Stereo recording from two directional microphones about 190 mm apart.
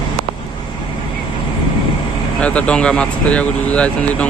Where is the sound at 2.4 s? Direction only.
5° left (ahead or behind).